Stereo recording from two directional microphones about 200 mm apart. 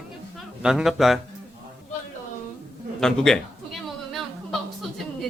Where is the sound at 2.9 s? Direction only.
5° left (ahead or behind).